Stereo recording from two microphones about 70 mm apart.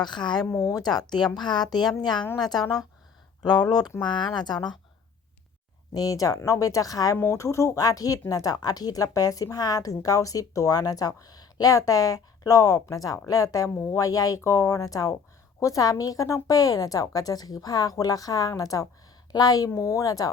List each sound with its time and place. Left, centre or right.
0.0 s speech: left
0.5 s speech: left
2.5 s a woman's voice: left
4.0 s speech: left
5.9 s a woman's voice: left
7.2 s a woman's voice: left
19.3 s a woman's voice: left
19.7 s speech: left